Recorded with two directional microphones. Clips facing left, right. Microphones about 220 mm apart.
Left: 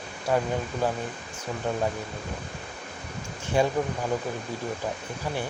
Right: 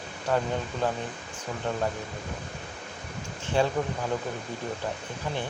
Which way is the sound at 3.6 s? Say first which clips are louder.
Left 1 dB; 10° left (ahead or behind).